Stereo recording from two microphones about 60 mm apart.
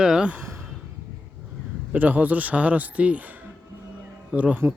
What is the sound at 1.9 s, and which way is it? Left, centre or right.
Speech, right.